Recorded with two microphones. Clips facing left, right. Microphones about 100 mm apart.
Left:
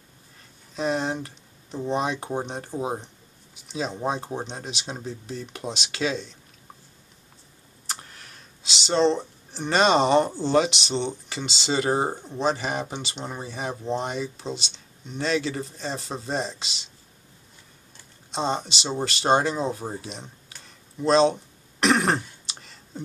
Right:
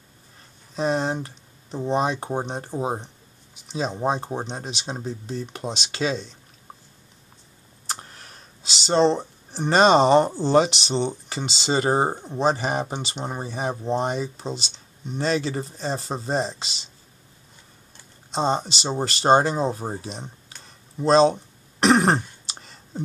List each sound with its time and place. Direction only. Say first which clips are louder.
0.7 s speech: right 2 dB; 35° right (ahead or behind)
7.8 s computer keyboard: right 3 dB; 35° right (ahead or behind)
9.5 s speech: right 4 dB; 40° right (ahead or behind)
12.1 s speech: right 2 dB; 25° right (ahead or behind)
12.4 s speech: right 3 dB; 40° right (ahead or behind)
18.3 s speech: right 3 dB; 35° right (ahead or behind)
21.0 s throat clearing: right 2 dB; 35° right (ahead or behind)